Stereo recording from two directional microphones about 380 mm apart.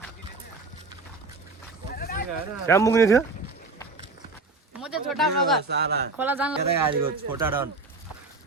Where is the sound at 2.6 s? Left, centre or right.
Centre.